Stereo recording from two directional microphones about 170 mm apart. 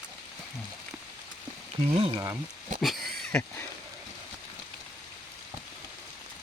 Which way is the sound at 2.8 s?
Centre (ahead or behind).